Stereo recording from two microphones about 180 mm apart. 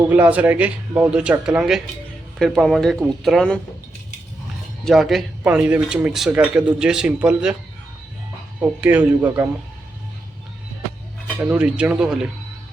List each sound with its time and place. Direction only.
0.1 s speech: 10° right (ahead or behind)
4.9 s speech: centre (ahead or behind)
8.6 s speech: 10° right (ahead or behind)
11.3 s speech: 10° right (ahead or behind)